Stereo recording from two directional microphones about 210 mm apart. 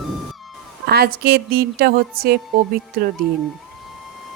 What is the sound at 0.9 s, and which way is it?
A woman's voice, 45° right (ahead or behind).